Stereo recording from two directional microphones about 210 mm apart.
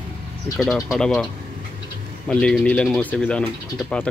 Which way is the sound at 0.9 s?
Centre (ahead or behind).